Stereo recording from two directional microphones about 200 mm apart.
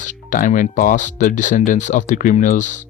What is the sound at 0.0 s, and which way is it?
Speech, 40° left (ahead or behind).